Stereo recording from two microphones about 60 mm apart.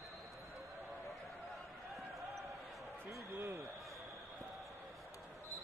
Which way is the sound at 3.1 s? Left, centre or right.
Right.